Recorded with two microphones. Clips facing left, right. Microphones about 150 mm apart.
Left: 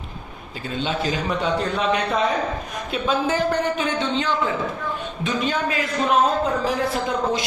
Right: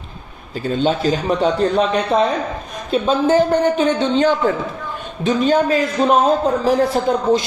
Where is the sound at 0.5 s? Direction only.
40° right (ahead or behind).